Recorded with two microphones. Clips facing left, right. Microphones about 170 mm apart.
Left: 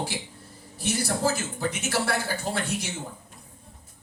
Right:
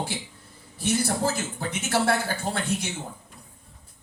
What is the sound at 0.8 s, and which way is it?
A man's voice, 55° right (ahead or behind).